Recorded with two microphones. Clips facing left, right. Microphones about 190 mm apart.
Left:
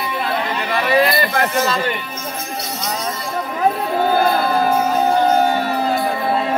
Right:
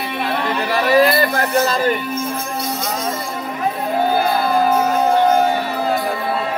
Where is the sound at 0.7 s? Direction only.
40° right (ahead or behind).